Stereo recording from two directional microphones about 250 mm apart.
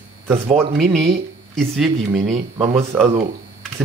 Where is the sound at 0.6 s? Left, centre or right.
Centre.